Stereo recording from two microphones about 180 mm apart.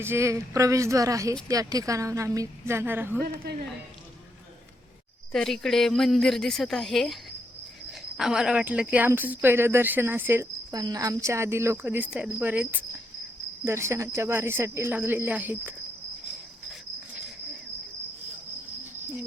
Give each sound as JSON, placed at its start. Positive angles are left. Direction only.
{"t": 0.0, "sound": "speech", "side_deg": -15}
{"t": 5.3, "sound": "a woman's voice", "side_deg": 0}